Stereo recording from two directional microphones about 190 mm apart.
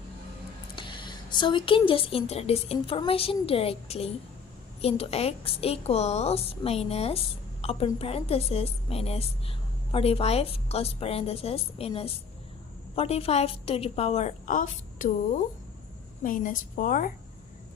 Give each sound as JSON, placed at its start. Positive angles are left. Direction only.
{"t": 0.8, "sound": "a woman's voice", "side_deg": 25}
{"t": 16.2, "sound": "a woman's voice", "side_deg": 45}